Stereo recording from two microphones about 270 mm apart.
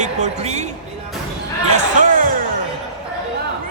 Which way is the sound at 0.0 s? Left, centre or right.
Right.